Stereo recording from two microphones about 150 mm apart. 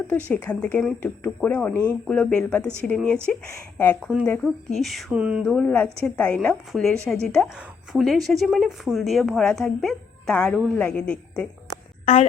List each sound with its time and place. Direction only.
0.3 s speech: 10° left (ahead or behind); by 5.4 s 5° right (ahead or behind)
5.4 s speech: 5° left (ahead or behind)
12.0 s a woman's voice: 45° left (ahead or behind)